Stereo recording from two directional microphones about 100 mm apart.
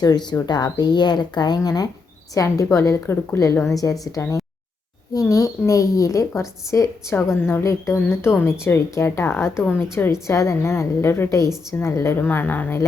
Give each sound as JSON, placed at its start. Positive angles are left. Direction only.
{"t": 0.0, "sound": "a woman's voice", "side_deg": 40}